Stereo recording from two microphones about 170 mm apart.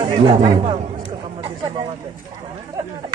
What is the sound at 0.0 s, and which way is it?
Speech, 30° right (ahead or behind).